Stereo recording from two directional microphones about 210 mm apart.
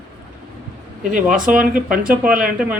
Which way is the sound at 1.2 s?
5° right (ahead or behind).